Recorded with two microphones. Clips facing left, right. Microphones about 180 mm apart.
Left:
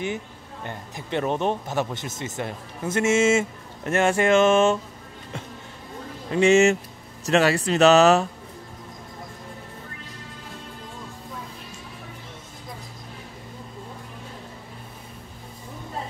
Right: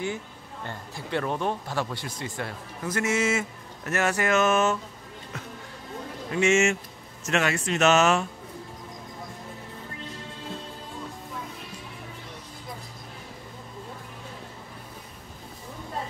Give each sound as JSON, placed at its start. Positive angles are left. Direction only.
{"t": 0.7, "sound": "speech", "side_deg": 20}
{"t": 6.3, "sound": "speech", "side_deg": 35}